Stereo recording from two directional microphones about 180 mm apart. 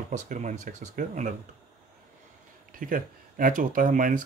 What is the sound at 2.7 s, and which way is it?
Speech, 50° right (ahead or behind).